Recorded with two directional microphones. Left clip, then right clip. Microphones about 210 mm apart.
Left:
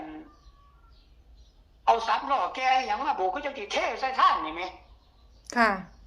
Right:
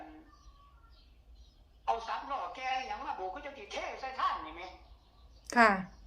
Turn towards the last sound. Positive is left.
turn(degrees=0)  # may be behind; listen again after turning